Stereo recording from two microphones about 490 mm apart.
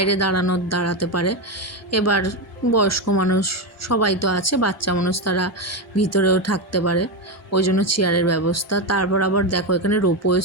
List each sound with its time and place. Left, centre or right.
0.0 s speech: left